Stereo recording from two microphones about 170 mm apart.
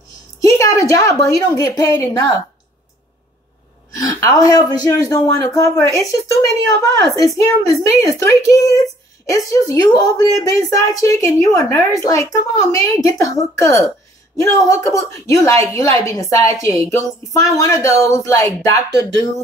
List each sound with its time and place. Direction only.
0.5 s a sound: 20° left (ahead or behind)
1.6 s speech: 20° left (ahead or behind)
3.9 s speech: 20° left (ahead or behind)